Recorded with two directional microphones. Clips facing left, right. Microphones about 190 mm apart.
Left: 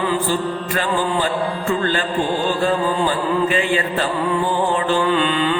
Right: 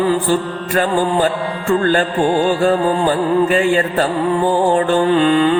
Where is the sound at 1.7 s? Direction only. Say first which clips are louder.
Right 8 dB; 50° right (ahead or behind).